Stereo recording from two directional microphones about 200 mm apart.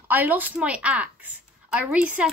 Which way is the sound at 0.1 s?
10° right (ahead or behind).